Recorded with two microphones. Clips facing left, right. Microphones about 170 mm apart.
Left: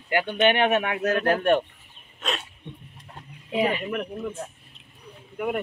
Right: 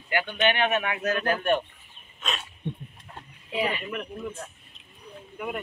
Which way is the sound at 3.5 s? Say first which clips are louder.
Left 4 dB; 40° left (ahead or behind).